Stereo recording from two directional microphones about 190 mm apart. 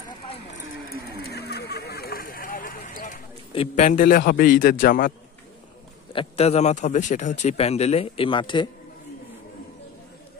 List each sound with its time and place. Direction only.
1.2 s a sound: 60° left (ahead or behind)
3.5 s a man's voice: 40° left (ahead or behind)
6.1 s speech: 30° left (ahead or behind)